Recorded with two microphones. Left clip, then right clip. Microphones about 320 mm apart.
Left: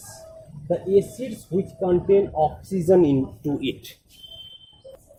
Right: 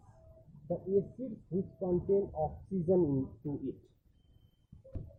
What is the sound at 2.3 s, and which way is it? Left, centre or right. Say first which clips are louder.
Speech: left 14 dB; left.